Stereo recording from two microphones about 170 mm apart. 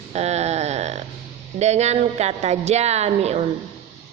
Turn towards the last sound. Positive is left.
turn(degrees=-40)  # may be behind; listen again after turning